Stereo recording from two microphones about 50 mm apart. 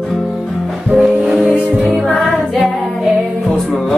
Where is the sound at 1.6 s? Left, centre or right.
Centre.